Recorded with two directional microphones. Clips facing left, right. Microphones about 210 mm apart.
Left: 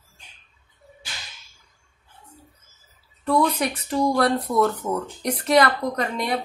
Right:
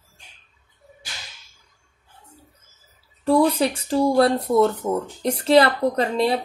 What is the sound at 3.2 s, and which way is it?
Speech, 30° right (ahead or behind).